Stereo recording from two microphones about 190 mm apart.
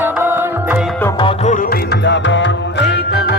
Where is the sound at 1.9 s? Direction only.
70° left (ahead or behind).